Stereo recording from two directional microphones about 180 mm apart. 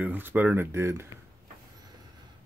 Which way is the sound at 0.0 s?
10° right (ahead or behind).